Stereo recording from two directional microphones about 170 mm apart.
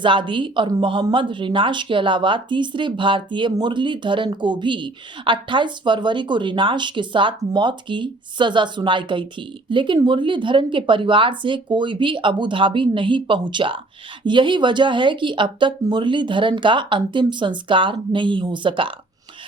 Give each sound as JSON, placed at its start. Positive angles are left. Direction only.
{"t": 0.0, "sound": "speech", "side_deg": -30}